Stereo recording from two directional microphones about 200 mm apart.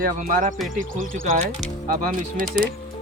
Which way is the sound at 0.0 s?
45° right (ahead or behind).